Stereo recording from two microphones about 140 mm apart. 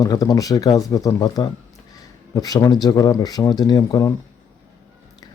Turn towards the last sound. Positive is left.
turn(degrees=25)  # may be behind; listen again after turning